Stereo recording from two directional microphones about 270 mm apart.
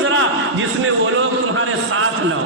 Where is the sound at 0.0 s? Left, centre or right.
Right.